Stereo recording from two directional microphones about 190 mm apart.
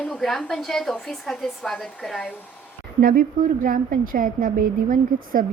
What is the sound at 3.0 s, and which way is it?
A woman's voice, 50° right (ahead or behind).